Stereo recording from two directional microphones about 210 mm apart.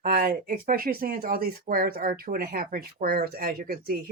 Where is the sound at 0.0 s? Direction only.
45° right (ahead or behind).